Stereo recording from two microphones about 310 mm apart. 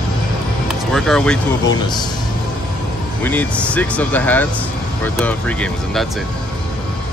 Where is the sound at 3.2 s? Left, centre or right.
Centre.